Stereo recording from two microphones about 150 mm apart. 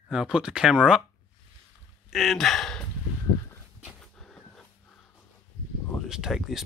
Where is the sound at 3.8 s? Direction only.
Centre (ahead or behind).